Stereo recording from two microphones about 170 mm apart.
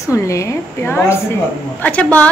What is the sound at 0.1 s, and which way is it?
A woman's voice, 20° left (ahead or behind).